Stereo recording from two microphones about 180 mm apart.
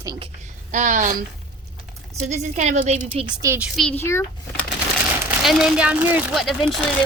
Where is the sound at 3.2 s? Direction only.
20° right (ahead or behind).